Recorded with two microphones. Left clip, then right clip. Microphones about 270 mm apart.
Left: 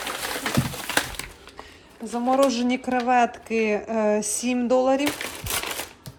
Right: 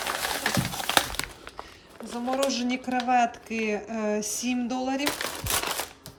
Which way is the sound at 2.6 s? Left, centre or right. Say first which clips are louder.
Left 4 dB; centre.